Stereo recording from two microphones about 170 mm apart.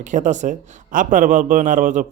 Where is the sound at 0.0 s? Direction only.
45° right (ahead or behind).